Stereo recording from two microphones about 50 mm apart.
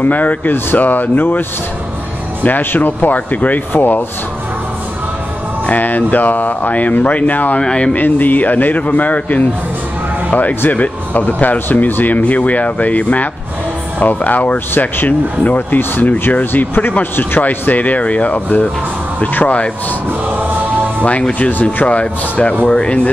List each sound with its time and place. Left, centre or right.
0.0 s speech: left
2.4 s speech: left
5.7 s speech: left
7.5 s speech: left
7.9 s speech: left
10.7 s speech: left
17.4 s speech: left
21.0 s speech: left